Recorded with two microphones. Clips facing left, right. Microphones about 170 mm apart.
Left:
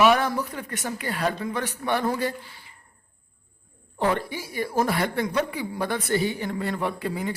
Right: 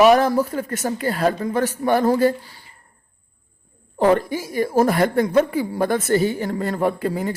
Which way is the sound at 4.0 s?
45° right (ahead or behind).